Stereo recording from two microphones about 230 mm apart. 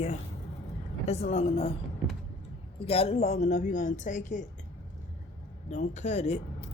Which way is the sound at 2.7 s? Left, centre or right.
Left.